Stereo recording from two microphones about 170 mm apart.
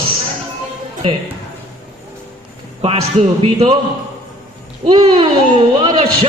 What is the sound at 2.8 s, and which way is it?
Speech, 40° right (ahead or behind).